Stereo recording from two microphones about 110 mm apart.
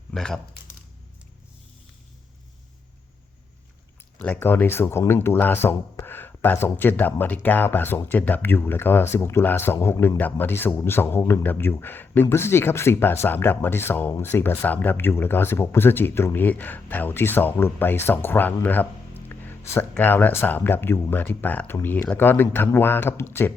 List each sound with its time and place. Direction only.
0.1 s speech: 5° left (ahead or behind)
4.2 s speech: 15° left (ahead or behind)